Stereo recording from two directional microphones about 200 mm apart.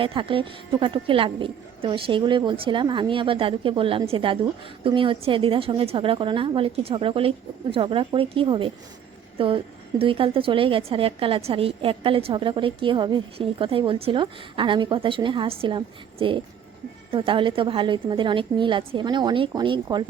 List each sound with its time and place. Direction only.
0.0 s a woman's voice: 25° right (ahead or behind)
10.0 s a woman's voice: 25° right (ahead or behind)